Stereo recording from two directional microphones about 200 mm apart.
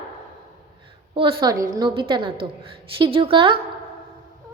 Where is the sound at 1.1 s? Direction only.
25° right (ahead or behind).